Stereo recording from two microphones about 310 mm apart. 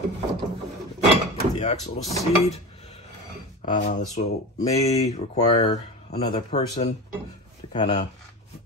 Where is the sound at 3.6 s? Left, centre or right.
Left.